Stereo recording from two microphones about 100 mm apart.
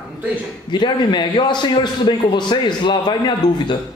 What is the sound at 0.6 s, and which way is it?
A man's voice, 50° left (ahead or behind).